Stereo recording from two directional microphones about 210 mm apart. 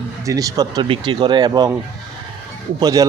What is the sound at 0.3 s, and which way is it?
A man's voice, 15° right (ahead or behind).